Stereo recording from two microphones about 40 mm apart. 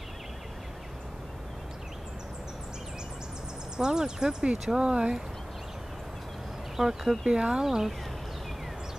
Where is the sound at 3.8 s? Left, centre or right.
Centre.